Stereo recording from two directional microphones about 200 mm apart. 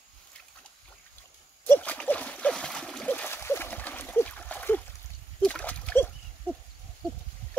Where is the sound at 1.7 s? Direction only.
5° left (ahead or behind).